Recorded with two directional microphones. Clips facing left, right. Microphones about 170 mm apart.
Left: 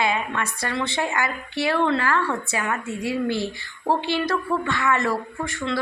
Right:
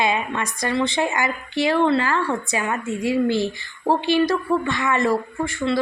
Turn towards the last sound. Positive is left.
turn(degrees=-15)  # may be behind; listen again after turning